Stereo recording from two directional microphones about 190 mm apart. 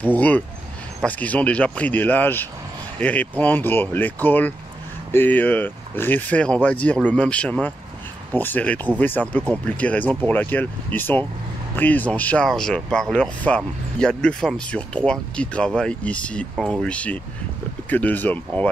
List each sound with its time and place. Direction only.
0.0 s speech: 10° left (ahead or behind)